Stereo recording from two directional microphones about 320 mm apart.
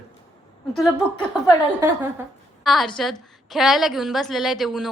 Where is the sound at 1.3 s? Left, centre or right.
Centre.